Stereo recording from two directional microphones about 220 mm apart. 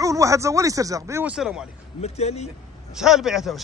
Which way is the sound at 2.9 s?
Centre (ahead or behind).